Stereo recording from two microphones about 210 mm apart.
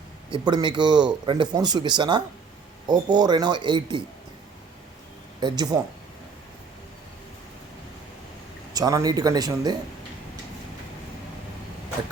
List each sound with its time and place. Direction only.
0.3 s a man's voice: 20° right (ahead or behind)
5.4 s a man's voice: 20° right (ahead or behind)
8.7 s speech: 15° right (ahead or behind)